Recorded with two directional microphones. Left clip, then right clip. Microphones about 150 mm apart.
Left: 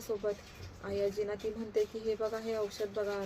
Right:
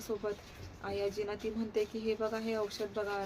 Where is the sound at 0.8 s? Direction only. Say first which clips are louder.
Left 2 dB; 15° right (ahead or behind).